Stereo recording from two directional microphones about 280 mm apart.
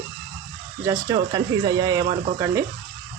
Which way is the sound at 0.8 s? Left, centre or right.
Centre.